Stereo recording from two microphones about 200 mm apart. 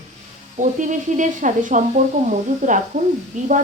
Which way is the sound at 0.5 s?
40° right (ahead or behind).